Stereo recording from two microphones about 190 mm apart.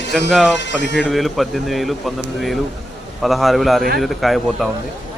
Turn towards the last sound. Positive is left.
turn(degrees=0)  # may be behind; listen again after turning